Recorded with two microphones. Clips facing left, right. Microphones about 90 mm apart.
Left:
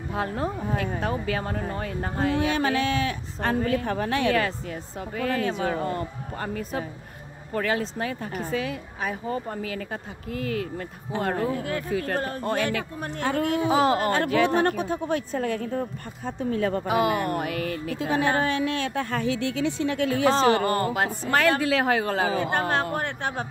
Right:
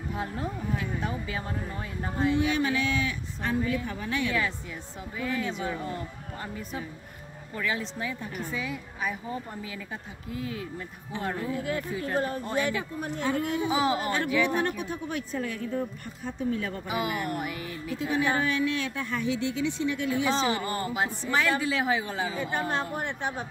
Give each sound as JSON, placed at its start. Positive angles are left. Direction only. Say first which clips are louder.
{"t": 0.1, "sound": "speech", "louder": "left 6 dB", "side_deg": 70}
{"t": 9.3, "sound": "speech", "louder": "left 6 dB", "side_deg": 65}
{"t": 16.8, "sound": "speech", "louder": "left 6 dB", "side_deg": 70}
{"t": 19.5, "sound": "speech", "louder": "left 3 dB", "side_deg": 80}
{"t": 20.2, "sound": "speech", "louder": "left 8 dB", "side_deg": 50}
{"t": 20.5, "sound": "speech", "louder": "left 6 dB", "side_deg": 65}